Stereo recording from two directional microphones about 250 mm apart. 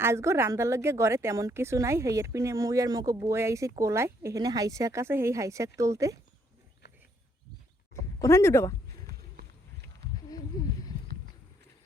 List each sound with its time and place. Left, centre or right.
0.0 s a woman's voice: centre
8.2 s speech: centre
9.0 s run: right
10.2 s a sound: centre